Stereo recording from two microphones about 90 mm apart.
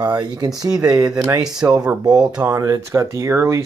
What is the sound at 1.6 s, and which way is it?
Speech, 30° right (ahead or behind).